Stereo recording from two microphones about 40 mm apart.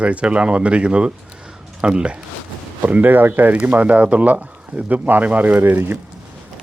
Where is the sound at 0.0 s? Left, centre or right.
Right.